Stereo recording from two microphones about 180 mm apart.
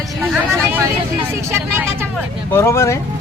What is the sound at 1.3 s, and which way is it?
Speech, 15° right (ahead or behind).